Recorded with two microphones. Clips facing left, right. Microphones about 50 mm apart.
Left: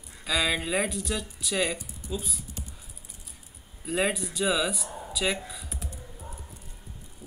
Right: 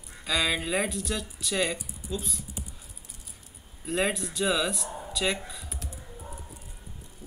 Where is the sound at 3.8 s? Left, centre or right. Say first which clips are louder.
Even; centre.